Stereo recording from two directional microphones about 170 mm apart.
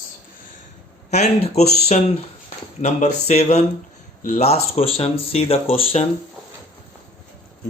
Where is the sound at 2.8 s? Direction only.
45° left (ahead or behind).